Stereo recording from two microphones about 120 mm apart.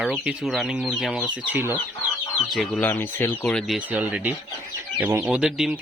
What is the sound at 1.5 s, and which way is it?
Speech, 15° right (ahead or behind).